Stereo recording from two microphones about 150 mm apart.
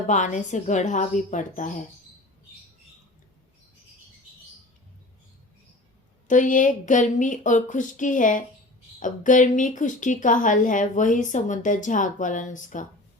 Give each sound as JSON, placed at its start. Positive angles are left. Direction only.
{"t": 0.1, "sound": "a woman's voice", "side_deg": 55}
{"t": 6.2, "sound": "a woman's voice", "side_deg": 60}